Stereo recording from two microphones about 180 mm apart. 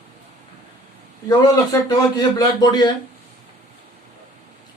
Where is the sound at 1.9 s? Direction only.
20° left (ahead or behind).